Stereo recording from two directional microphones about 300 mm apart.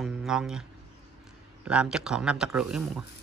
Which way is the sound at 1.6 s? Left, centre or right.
Centre.